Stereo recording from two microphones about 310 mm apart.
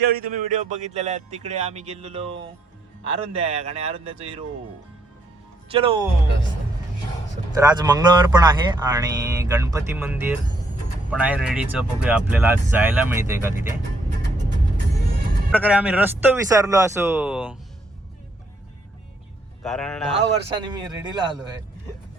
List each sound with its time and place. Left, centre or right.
0.0 s speech: right
5.7 s speech: centre
7.6 s a man's voice: centre
15.5 s a man's voice: centre
19.6 s a man's voice: centre
20.6 s speech: centre